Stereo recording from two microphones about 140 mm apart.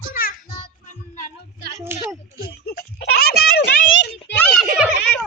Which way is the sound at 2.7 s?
90° left.